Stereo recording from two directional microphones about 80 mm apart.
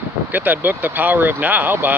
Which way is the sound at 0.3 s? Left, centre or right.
Right.